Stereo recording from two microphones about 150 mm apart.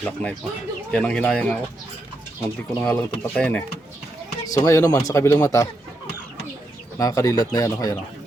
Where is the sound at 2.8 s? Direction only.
5° left (ahead or behind).